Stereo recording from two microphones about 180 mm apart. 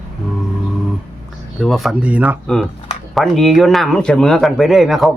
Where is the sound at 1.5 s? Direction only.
Centre (ahead or behind).